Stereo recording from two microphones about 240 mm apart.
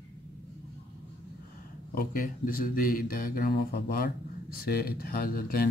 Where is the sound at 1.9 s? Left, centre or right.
Left.